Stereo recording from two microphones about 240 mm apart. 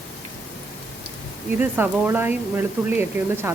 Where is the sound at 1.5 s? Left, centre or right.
Centre.